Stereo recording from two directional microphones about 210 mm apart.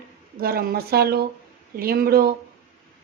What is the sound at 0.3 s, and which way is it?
Speech, 45° right (ahead or behind).